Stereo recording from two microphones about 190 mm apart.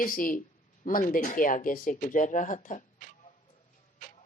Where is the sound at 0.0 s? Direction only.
45° left (ahead or behind).